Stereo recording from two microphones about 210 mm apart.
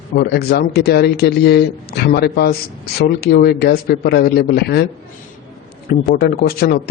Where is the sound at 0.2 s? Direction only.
50° left (ahead or behind).